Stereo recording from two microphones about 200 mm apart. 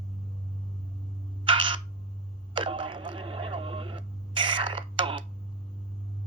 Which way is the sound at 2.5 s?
25° right (ahead or behind).